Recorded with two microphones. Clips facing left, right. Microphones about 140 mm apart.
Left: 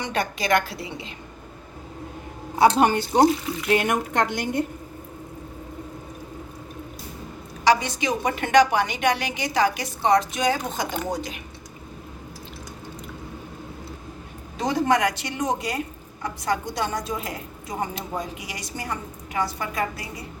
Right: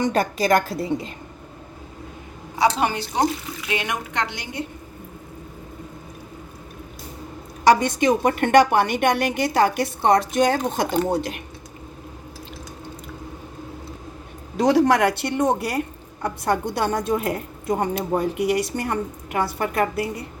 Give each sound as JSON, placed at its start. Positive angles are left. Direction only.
{"t": 0.0, "sound": "a woman's voice", "side_deg": -40}
{"t": 2.6, "sound": "a woman's voice", "side_deg": 50}
{"t": 7.7, "sound": "a woman's voice", "side_deg": -50}
{"t": 14.5, "sound": "a woman's voice", "side_deg": -70}